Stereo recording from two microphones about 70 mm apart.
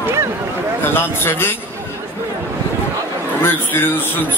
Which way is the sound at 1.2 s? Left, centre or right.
Left.